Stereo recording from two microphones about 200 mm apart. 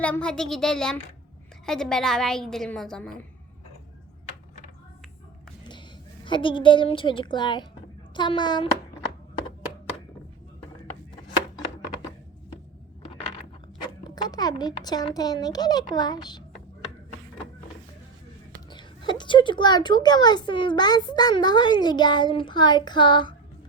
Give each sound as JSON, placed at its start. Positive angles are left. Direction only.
{"t": 0.0, "sound": "a woman's voice", "side_deg": 5}
{"t": 6.2, "sound": "a woman's voice", "side_deg": 25}
{"t": 13.8, "sound": "a child's voice", "side_deg": 20}
{"t": 18.7, "sound": "a woman's voice", "side_deg": 20}